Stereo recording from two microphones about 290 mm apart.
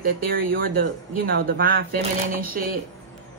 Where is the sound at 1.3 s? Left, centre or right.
Right.